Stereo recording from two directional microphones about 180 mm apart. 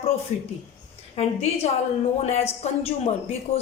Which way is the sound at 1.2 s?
35° left (ahead or behind).